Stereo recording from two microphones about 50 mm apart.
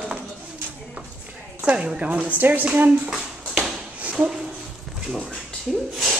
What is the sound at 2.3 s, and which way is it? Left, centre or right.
Speech, right.